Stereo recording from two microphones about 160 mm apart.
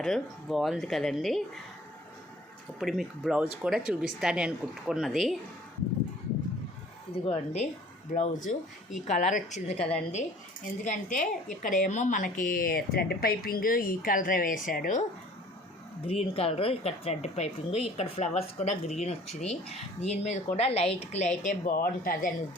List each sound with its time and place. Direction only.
0.0 s a woman's voice: centre (ahead or behind)
2.7 s a woman's voice: centre (ahead or behind)
7.1 s speech: 35° left (ahead or behind)
8.1 s speech: 50° left (ahead or behind)
16.0 s speech: 35° left (ahead or behind); by 22.3 s 65° left (ahead or behind)